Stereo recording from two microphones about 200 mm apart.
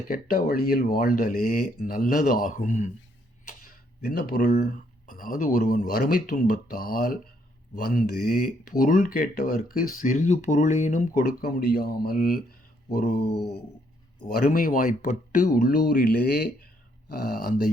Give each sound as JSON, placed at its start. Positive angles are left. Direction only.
{"t": 0.1, "sound": "speech", "side_deg": 45}